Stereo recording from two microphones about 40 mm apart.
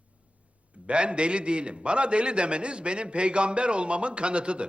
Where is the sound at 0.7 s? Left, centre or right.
Right.